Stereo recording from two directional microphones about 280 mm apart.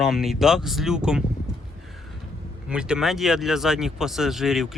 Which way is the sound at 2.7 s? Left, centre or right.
Centre.